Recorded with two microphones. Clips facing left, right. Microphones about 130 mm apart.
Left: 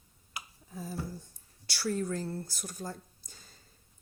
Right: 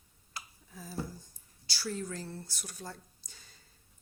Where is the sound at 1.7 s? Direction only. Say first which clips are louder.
Left 5 dB; 60° left (ahead or behind).